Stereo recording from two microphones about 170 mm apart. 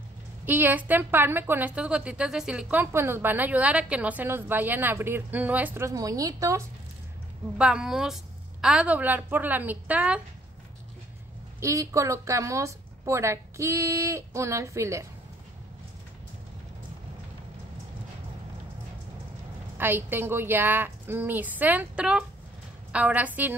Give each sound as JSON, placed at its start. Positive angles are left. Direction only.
{"t": 0.5, "sound": "a woman's voice", "side_deg": -10}
{"t": 7.5, "sound": "a woman's voice", "side_deg": -5}
{"t": 11.6, "sound": "a woman's voice", "side_deg": -20}
{"t": 19.8, "sound": "a woman's voice", "side_deg": -10}